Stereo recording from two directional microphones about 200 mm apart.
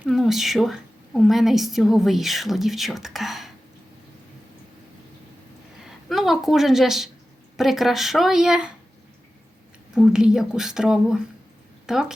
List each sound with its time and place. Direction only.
0.0 s a woman's voice: centre (ahead or behind)
5.8 s a sound: centre (ahead or behind)
7.5 s a woman's voice: centre (ahead or behind)
9.9 s a woman's voice: 5° right (ahead or behind)